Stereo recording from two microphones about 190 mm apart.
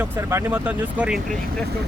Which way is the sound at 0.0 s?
10° right (ahead or behind).